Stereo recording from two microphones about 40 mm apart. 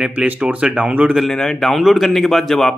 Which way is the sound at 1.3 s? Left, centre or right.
Centre.